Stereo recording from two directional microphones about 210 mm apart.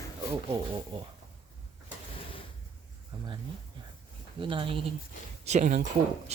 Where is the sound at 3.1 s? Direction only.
25° right (ahead or behind).